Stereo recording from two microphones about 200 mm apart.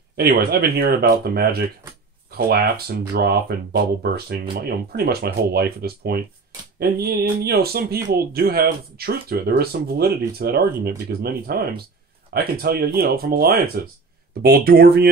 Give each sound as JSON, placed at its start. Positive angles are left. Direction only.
{"t": 0.2, "sound": "speech", "side_deg": -50}